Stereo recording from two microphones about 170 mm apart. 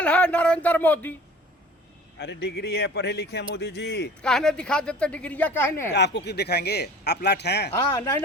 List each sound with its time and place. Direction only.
0.0 s speech: 5° left (ahead or behind)
2.1 s a man's voice: 80° left
4.2 s speech: 5° left (ahead or behind)
5.9 s a man's voice: 90° left